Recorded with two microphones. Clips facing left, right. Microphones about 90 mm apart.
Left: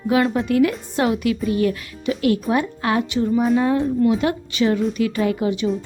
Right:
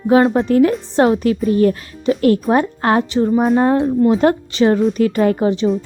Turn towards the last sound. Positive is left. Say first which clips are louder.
# right 5 dB
turn(degrees=-40)  # may be behind; listen again after turning